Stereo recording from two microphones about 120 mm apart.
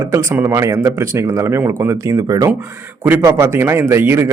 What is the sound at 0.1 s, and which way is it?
Speech, 25° right (ahead or behind).